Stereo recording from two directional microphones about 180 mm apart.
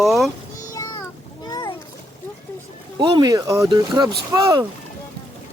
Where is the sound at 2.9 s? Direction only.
25° right (ahead or behind).